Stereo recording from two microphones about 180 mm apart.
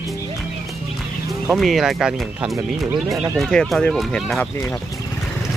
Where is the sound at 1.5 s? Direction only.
Centre (ahead or behind).